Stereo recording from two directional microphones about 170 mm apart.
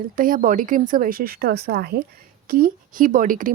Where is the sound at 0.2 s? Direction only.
50° right (ahead or behind).